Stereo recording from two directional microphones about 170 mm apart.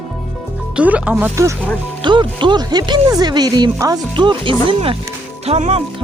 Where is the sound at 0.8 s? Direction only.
5° right (ahead or behind).